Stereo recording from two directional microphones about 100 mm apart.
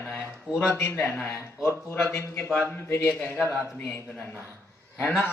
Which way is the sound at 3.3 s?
20° right (ahead or behind).